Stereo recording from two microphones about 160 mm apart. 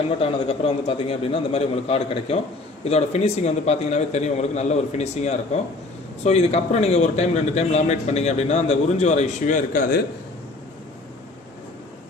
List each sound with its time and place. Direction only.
0.2 s a man's voice: 35° left (ahead or behind); by 10.0 s 55° left (ahead or behind)